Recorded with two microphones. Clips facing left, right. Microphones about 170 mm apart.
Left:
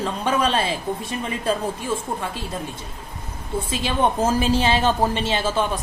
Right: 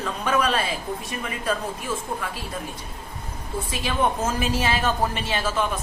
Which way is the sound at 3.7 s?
30° left (ahead or behind).